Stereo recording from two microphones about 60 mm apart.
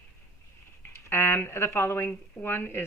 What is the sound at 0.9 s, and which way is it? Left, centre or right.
Speech, left.